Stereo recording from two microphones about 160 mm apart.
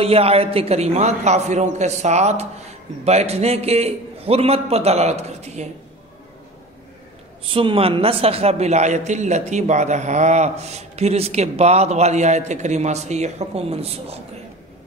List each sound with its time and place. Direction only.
0.0 s a man's voice: 40° right (ahead or behind)
7.4 s a man's voice: 35° right (ahead or behind)